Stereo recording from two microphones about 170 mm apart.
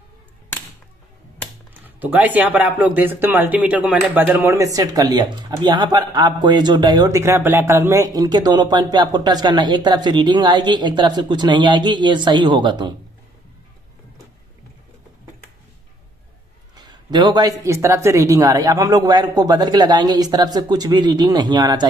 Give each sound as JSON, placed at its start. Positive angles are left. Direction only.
{"t": 1.7, "sound": "speech", "side_deg": -10}
{"t": 16.7, "sound": "speech", "side_deg": -25}